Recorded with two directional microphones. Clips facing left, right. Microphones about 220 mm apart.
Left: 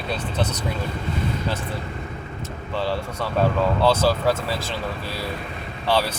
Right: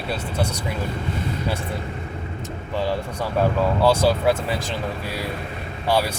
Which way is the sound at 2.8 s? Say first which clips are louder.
Right 1 dB; 15° right (ahead or behind).